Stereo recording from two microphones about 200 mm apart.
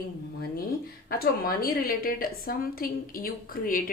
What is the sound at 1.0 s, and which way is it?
A woman's voice, 50° left (ahead or behind).